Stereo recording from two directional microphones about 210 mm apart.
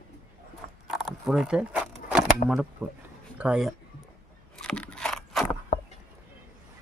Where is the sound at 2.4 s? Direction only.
35° left (ahead or behind).